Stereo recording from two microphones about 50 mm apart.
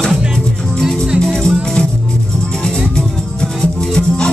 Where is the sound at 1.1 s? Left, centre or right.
Centre.